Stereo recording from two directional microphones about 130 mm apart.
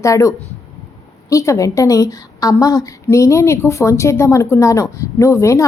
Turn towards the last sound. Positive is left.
turn(degrees=20)  # may be behind; listen again after turning